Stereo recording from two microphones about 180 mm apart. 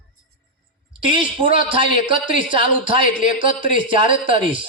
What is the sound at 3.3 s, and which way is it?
Speech, 45° left (ahead or behind).